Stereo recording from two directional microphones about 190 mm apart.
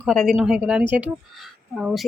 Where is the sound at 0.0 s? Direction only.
Centre (ahead or behind).